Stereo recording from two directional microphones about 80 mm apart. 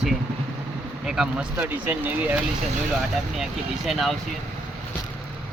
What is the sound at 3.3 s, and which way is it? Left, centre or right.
Speech, centre.